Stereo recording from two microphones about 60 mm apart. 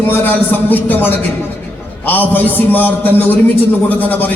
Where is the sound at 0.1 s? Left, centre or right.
Left.